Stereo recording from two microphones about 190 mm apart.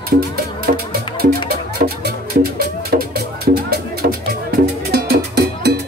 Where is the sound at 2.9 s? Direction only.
55° right (ahead or behind).